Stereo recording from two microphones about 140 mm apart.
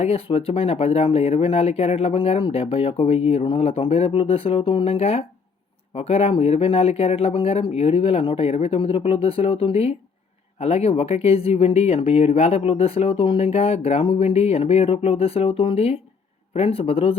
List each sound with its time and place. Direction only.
0.0 s speech: 45° left (ahead or behind)